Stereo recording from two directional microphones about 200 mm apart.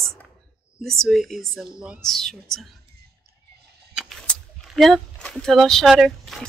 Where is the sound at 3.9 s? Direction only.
Centre (ahead or behind).